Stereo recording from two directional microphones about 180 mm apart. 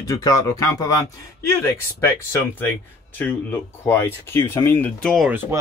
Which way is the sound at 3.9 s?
15° left (ahead or behind).